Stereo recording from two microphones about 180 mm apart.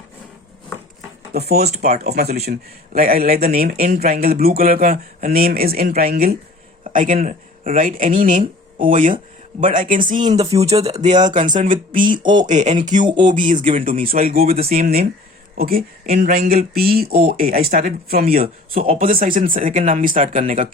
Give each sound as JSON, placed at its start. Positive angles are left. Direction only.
{"t": 1.3, "sound": "speech", "side_deg": -60}
{"t": 1.6, "sound": "speech", "side_deg": -40}
{"t": 1.9, "sound": "speech", "side_deg": -60}
{"t": 10.3, "sound": "speech", "side_deg": -30}
{"t": 12.1, "sound": "speech", "side_deg": -25}
{"t": 12.5, "sound": "speech", "side_deg": -40}
{"t": 14.4, "sound": "speech", "side_deg": -35}
{"t": 14.7, "sound": "speech", "side_deg": -55}